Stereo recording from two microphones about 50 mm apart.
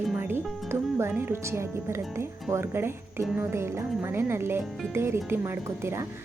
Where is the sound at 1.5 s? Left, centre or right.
Right.